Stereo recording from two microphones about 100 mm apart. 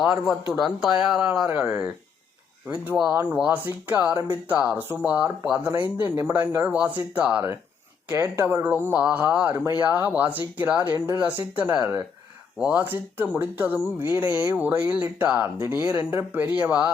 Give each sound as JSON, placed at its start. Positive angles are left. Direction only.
{"t": 0.0, "sound": "a man's voice", "side_deg": -5}
{"t": 4.1, "sound": "speech", "side_deg": -35}
{"t": 4.4, "sound": "speech", "side_deg": -15}
{"t": 8.1, "sound": "speech", "side_deg": -30}
{"t": 11.8, "sound": "speech", "side_deg": -30}
{"t": 12.5, "sound": "speech", "side_deg": -15}